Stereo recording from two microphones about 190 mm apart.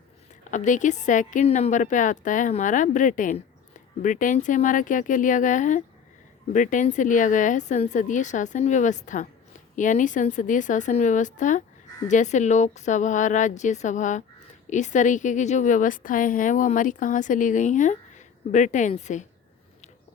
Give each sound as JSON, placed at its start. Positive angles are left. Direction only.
{"t": 0.5, "sound": "speech", "side_deg": 40}